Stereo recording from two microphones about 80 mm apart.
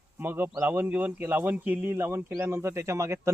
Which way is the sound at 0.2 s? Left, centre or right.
Right.